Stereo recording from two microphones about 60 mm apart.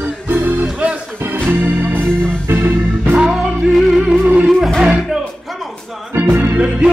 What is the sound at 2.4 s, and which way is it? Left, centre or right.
Organ, right.